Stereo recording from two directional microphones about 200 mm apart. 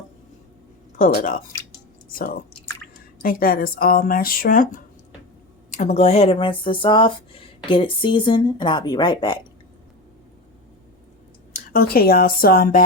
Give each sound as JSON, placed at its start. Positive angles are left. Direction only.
{"t": 0.9, "sound": "speech", "side_deg": 40}
{"t": 11.7, "sound": "speech", "side_deg": 50}